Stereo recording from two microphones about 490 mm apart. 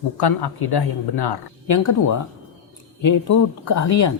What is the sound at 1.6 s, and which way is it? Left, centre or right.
A woman's voice, left.